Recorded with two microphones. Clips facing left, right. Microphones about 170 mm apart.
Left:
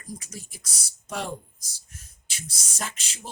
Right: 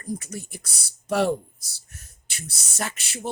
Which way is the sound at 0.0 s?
60° right (ahead or behind).